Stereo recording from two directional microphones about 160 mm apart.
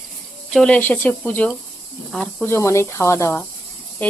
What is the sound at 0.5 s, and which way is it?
Speech, 5° left (ahead or behind).